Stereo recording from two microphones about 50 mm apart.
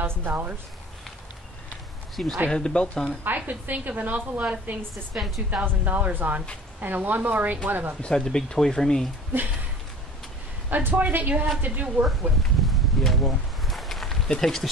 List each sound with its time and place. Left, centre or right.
0.0 s a woman's voice: right
2.2 s speech: centre
3.3 s a woman's voice: right
5.1 s speech: centre
5.7 s a woman's voice: right
8.0 s speech: centre
10.7 s a woman's voice: right
12.1 s a sound: centre